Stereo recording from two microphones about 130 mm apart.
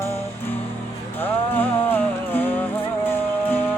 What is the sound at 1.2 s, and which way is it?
Music, 15° left (ahead or behind).